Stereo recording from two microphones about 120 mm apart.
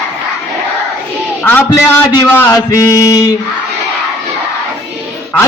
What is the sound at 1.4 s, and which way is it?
A man's voice, 15° left (ahead or behind).